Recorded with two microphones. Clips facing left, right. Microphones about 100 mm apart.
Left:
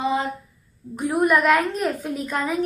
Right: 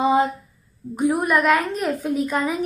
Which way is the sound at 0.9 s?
15° right (ahead or behind).